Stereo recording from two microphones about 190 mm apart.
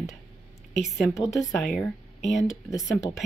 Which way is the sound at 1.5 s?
Centre (ahead or behind).